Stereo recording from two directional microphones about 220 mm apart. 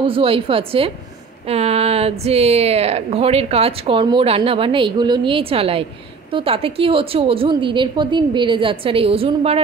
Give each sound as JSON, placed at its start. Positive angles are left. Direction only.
{"t": 0.0, "sound": "speech", "side_deg": -25}